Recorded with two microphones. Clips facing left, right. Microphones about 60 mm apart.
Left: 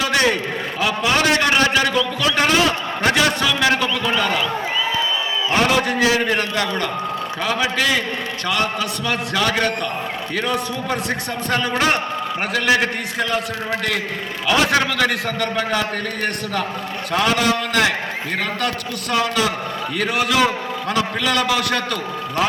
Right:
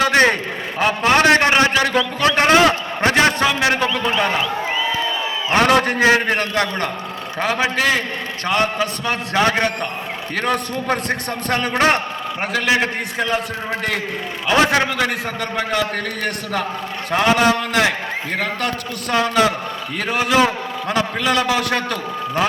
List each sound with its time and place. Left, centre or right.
0.0 s a man's voice: right
5.5 s a man's voice: right
10.3 s a man's voice: right
14.4 s a man's voice: right
17.1 s a man's voice: right
19.1 s a man's voice: right